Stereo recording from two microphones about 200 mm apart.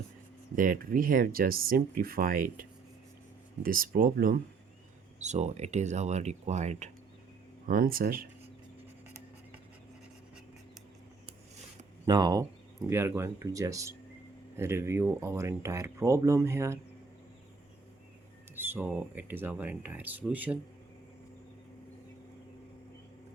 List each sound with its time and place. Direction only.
0.5 s speech: 40° right (ahead or behind)
5.2 s speech: 35° right (ahead or behind)
7.7 s speech: 45° right (ahead or behind)
12.0 s speech: 20° right (ahead or behind)
18.5 s speech: 10° right (ahead or behind)